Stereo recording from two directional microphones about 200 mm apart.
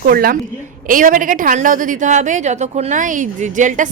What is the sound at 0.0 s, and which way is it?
A woman's voice, 45° right (ahead or behind).